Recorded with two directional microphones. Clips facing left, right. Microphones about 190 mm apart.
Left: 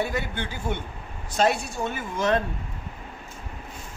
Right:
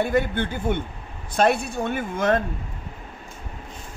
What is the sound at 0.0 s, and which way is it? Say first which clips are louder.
A woman's voice: right 6 dB; 55° right (ahead or behind).